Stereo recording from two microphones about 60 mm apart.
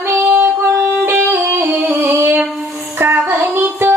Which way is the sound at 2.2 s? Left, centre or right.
Right.